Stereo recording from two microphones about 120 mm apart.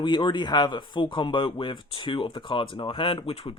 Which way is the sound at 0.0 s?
40° left (ahead or behind).